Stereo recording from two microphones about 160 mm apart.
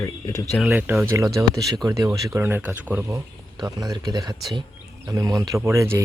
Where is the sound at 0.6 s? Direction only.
5° right (ahead or behind).